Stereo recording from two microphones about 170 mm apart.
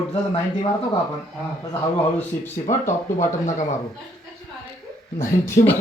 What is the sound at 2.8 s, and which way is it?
Speech, 45° left (ahead or behind).